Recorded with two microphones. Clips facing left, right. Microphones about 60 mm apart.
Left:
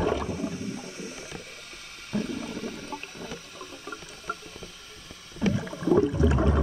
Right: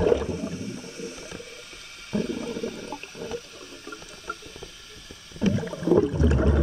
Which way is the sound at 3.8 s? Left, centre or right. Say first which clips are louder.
Even; left.